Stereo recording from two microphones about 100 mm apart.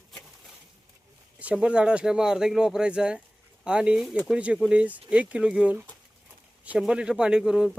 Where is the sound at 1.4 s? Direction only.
10° right (ahead or behind).